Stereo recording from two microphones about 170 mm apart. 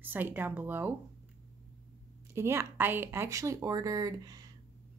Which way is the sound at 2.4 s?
15° right (ahead or behind).